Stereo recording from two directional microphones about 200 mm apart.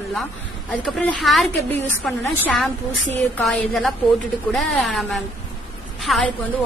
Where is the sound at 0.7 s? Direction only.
5° left (ahead or behind).